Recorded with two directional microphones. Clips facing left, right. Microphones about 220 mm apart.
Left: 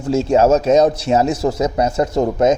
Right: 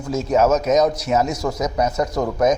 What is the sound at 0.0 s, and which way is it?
Speech, 30° left (ahead or behind).